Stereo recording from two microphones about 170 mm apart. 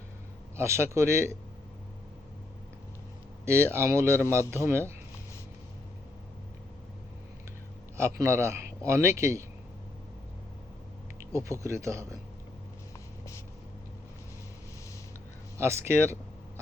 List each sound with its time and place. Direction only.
0.5 s speech: 15° right (ahead or behind)
3.4 s speech: 15° right (ahead or behind)
7.9 s speech: 15° right (ahead or behind)
11.3 s speech: 15° right (ahead or behind)
15.5 s speech: 15° right (ahead or behind)